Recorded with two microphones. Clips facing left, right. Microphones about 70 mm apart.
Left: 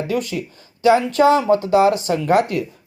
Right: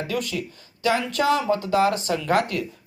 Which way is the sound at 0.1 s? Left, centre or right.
Left.